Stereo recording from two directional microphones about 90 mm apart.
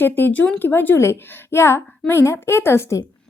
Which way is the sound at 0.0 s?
25° left (ahead or behind).